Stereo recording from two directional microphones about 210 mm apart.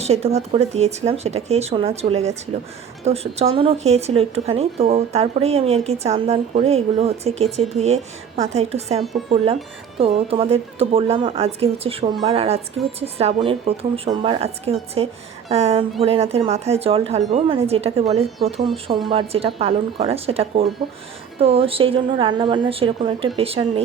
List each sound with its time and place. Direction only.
0.0 s a woman's voice: 30° right (ahead or behind)